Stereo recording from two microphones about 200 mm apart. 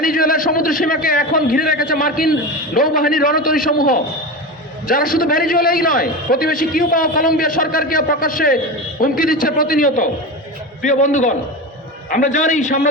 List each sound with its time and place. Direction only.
0.0 s a man's voice: 45° left (ahead or behind)